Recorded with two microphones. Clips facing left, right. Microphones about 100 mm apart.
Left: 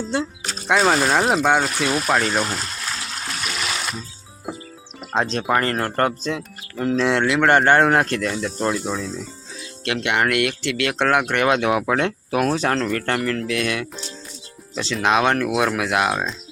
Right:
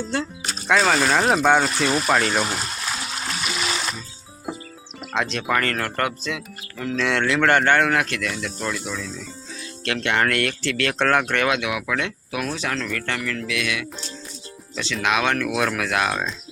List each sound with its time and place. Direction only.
0.1 s speech: 25° left (ahead or behind)
0.7 s speech: 10° left (ahead or behind)
2.4 s water: 5° right (ahead or behind)
5.1 s speech: 35° left (ahead or behind)
9.8 s speech: 20° left (ahead or behind)
11.4 s speech: 35° left (ahead or behind)
15.0 s speech: 30° left (ahead or behind)